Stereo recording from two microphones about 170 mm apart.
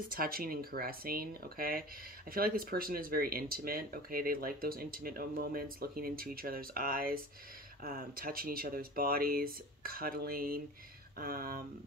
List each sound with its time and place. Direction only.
0.1 s speech: 60° right (ahead or behind)